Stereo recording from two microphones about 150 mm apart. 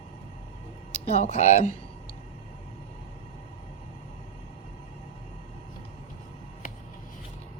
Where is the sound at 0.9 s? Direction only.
45° left (ahead or behind).